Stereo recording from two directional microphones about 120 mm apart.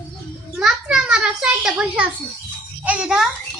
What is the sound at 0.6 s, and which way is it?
A child's voice, 5° right (ahead or behind).